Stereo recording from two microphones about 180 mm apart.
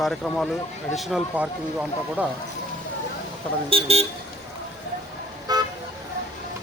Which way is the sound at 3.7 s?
30° right (ahead or behind).